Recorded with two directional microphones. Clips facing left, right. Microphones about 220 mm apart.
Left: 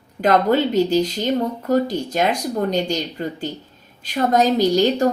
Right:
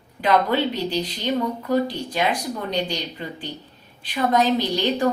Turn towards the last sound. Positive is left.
turn(degrees=45)  # may be behind; listen again after turning